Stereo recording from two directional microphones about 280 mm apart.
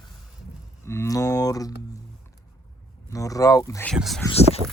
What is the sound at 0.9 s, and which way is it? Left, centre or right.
Speech, centre.